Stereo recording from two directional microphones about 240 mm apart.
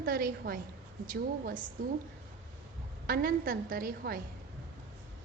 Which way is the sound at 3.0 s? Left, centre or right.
Right.